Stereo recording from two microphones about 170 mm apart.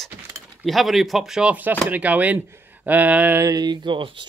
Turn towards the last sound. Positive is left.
turn(degrees=-30)  # may be behind; listen again after turning